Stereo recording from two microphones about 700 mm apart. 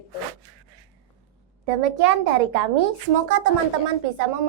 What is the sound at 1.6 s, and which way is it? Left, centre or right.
A woman's voice, right.